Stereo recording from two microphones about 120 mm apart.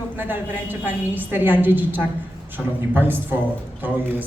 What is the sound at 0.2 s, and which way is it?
A woman's voice, 15° right (ahead or behind).